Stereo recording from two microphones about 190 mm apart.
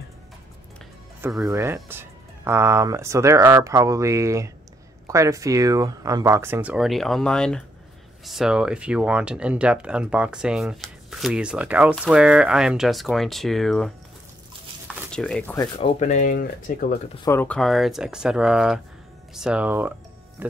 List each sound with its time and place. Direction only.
1.4 s speech: 15° right (ahead or behind); by 13.9 s centre (ahead or behind)
15.0 s speech: 5° left (ahead or behind)
16.0 s speech: 40° left (ahead or behind)
17.2 s speech: 10° left (ahead or behind); by 19.9 s 10° right (ahead or behind)